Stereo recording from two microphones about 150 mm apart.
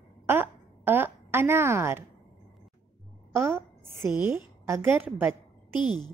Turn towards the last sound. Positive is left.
turn(degrees=30)  # may be behind; listen again after turning